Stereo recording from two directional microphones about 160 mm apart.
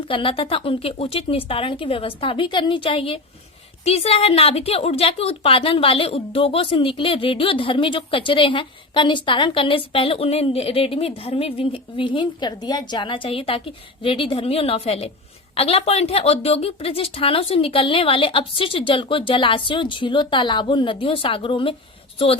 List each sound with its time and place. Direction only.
0.1 s a woman's voice: 35° left (ahead or behind)